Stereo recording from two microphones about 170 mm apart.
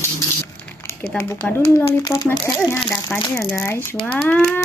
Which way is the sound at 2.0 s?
20° left (ahead or behind).